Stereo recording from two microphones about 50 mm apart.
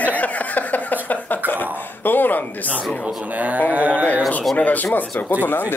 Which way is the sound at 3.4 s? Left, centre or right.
Right.